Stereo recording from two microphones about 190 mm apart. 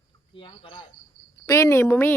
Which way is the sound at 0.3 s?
25° left (ahead or behind).